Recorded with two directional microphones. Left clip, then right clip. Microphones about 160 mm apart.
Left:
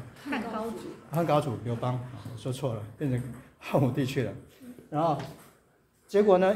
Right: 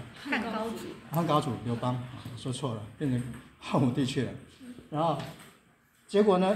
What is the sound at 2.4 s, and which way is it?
A man's voice, 25° left (ahead or behind).